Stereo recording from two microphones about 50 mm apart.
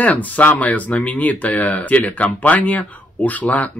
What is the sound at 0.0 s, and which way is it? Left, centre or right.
Speech, left.